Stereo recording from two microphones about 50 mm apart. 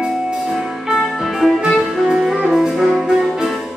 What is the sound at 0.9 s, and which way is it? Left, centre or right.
Music, centre.